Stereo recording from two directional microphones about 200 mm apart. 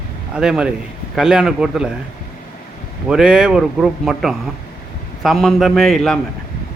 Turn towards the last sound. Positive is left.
turn(degrees=0)  # may be behind; listen again after turning